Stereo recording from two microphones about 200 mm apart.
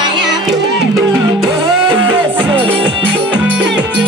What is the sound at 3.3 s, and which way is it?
Music, 5° right (ahead or behind).